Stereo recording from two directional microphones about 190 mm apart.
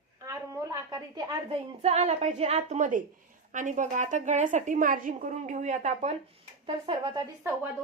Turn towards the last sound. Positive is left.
turn(degrees=-15)  # may be behind; listen again after turning